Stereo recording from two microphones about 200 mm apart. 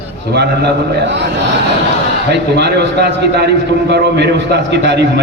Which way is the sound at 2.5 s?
55° right (ahead or behind).